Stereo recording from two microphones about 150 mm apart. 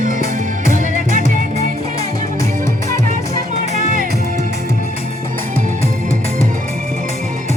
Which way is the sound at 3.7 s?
65° right (ahead or behind).